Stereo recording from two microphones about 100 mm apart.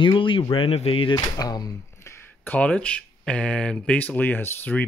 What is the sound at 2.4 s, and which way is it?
Speech, 15° left (ahead or behind).